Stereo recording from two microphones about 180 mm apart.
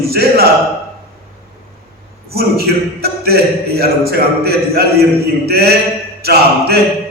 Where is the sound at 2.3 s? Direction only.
60° right (ahead or behind).